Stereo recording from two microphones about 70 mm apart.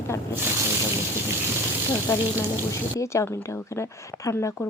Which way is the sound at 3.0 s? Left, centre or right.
Left.